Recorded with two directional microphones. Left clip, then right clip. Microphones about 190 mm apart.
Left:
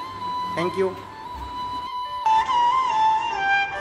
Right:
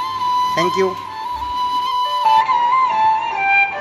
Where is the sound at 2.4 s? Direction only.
25° right (ahead or behind).